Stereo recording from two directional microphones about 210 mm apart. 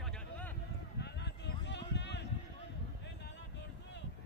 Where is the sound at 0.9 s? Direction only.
55° left (ahead or behind).